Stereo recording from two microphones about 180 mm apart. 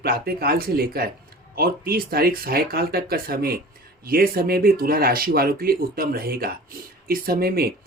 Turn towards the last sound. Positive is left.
turn(degrees=-55)  # may be behind; listen again after turning